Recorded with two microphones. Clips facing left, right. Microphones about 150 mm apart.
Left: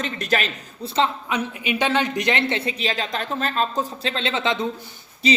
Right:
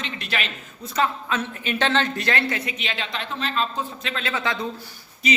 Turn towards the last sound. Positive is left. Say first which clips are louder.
# left 4 dB
turn(degrees=30)  # may be behind; listen again after turning